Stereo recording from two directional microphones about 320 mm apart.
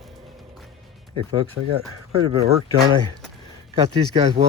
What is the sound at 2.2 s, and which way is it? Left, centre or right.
Speech, centre.